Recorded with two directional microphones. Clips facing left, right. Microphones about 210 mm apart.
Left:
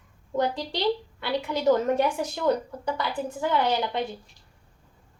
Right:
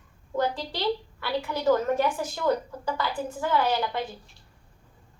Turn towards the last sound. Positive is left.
turn(degrees=20)  # may be behind; listen again after turning